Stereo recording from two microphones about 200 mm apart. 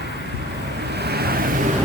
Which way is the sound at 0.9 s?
55° right (ahead or behind).